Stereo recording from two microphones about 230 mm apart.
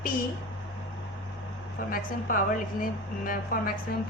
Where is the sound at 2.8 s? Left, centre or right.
Left.